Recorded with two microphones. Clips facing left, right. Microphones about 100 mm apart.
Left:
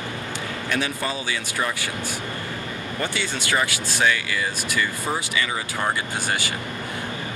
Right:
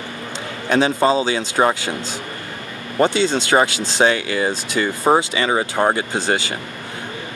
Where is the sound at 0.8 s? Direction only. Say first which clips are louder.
Right 14 dB; 25° right (ahead or behind).